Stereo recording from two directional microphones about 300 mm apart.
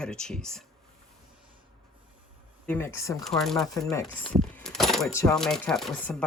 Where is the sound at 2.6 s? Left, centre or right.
Centre.